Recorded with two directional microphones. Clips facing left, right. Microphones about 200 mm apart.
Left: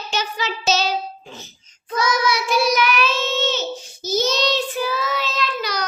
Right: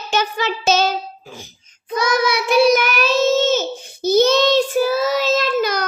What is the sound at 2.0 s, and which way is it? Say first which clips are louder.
Child singing: right 2 dB; 60° right (ahead or behind).